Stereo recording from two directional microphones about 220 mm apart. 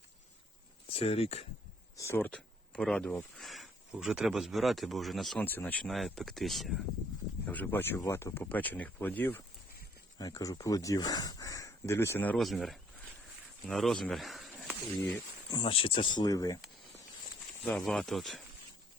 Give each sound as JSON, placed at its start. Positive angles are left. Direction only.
{"t": 0.9, "sound": "speech", "side_deg": 25}
{"t": 2.0, "sound": "speech", "side_deg": 10}
{"t": 15.4, "sound": "speech", "side_deg": 20}
{"t": 17.7, "sound": "speech", "side_deg": 0}